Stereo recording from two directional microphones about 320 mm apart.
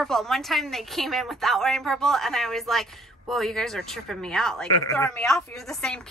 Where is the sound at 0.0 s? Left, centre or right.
Centre.